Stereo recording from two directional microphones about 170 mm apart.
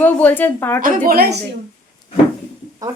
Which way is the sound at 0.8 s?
55° right (ahead or behind).